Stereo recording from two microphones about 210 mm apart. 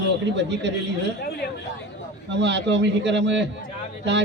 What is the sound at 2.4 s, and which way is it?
A man's voice, 55° right (ahead or behind).